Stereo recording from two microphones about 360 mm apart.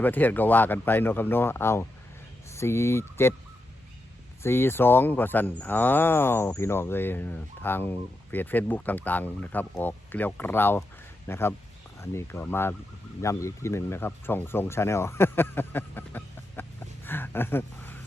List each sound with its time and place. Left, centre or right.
0.0 s speech: centre
4.4 s speech: centre
17.1 s a sound: centre